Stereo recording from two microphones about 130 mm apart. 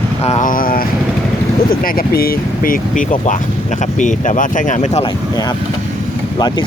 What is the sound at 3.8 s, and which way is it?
Speech, 75° left (ahead or behind).